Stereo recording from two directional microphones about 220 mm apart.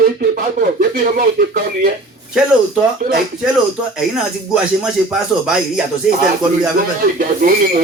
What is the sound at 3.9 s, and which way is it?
Speech, 5° right (ahead or behind).